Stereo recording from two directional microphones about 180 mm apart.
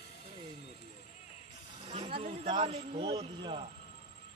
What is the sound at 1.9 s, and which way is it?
Speech, 30° right (ahead or behind).